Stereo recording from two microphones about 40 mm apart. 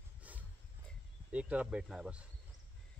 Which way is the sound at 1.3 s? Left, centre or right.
Right.